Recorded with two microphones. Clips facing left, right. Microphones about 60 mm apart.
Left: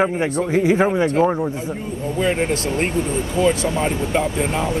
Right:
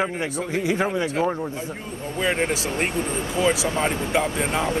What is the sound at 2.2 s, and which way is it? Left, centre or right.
Speech, centre.